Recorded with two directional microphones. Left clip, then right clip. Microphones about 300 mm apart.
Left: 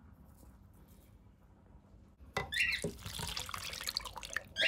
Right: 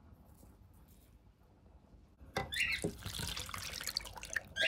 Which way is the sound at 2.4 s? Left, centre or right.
Centre.